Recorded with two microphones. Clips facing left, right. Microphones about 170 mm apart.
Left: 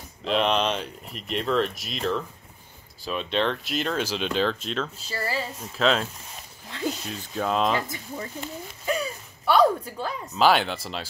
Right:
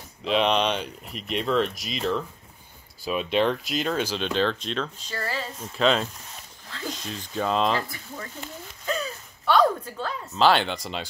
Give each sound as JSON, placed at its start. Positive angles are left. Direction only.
{"t": 0.2, "sound": "speech", "side_deg": 0}
{"t": 7.8, "sound": "speech", "side_deg": 20}
{"t": 8.8, "sound": "a sound", "side_deg": 10}
{"t": 10.3, "sound": "speech", "side_deg": 5}